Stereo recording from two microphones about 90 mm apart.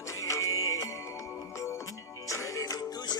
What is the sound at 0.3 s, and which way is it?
Music, 40° left (ahead or behind).